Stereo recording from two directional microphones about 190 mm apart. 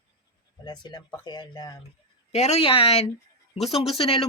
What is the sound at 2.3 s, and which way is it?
Speech, 35° left (ahead or behind).